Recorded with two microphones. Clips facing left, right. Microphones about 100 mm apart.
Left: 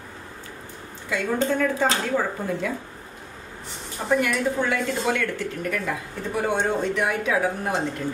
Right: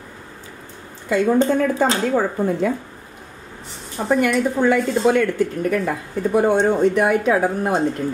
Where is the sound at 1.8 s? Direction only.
40° right (ahead or behind).